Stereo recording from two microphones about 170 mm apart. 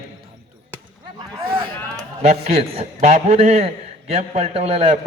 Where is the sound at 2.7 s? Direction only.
40° right (ahead or behind).